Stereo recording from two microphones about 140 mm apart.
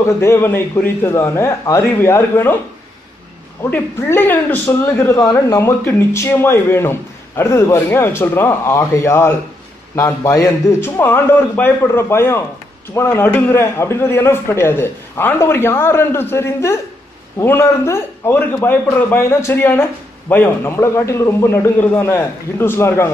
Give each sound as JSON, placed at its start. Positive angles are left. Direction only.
{"t": 0.0, "sound": "a man's voice", "side_deg": 20}
{"t": 3.7, "sound": "a man's voice", "side_deg": 15}